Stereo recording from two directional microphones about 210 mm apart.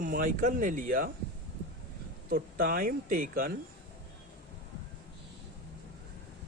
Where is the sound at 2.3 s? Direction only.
45° right (ahead or behind).